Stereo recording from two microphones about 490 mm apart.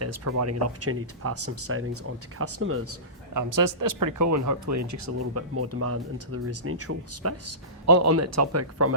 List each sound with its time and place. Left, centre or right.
0.0 s speech: right
3.5 s speech: right